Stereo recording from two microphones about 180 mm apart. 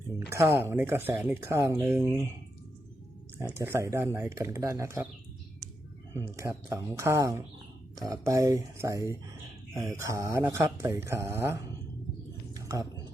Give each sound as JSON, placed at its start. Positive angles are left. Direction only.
{"t": 0.3, "sound": "speech", "side_deg": -15}
{"t": 3.3, "sound": "speech", "side_deg": -15}
{"t": 6.1, "sound": "speech", "side_deg": -15}
{"t": 12.5, "sound": "a sound", "side_deg": -20}